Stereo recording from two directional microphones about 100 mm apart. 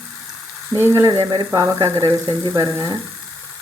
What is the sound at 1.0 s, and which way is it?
Speech, 40° right (ahead or behind).